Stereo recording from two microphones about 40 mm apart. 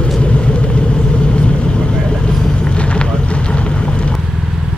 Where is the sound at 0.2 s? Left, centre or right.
Left.